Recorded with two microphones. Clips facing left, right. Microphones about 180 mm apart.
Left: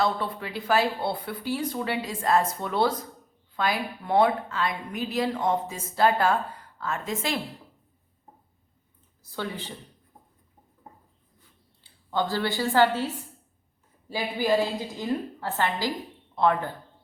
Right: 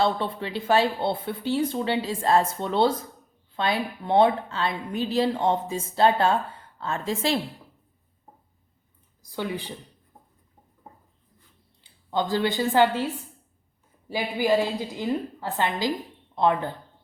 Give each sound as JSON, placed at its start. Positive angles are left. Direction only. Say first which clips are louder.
{"t": 0.0, "sound": "a woman's voice", "louder": "right 2 dB", "side_deg": -25}
{"t": 9.2, "sound": "a woman's voice", "louder": "right 3 dB", "side_deg": -15}
{"t": 11.8, "sound": "a woman's voice", "louder": "right 1 dB", "side_deg": -15}
{"t": 14.1, "sound": "a woman's voice", "louder": "right 2 dB", "side_deg": -15}